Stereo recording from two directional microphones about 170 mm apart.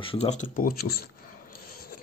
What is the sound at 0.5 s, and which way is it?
Speech, 60° left (ahead or behind).